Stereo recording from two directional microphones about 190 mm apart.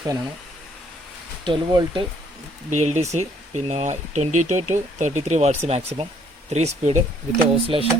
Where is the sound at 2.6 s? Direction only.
40° right (ahead or behind).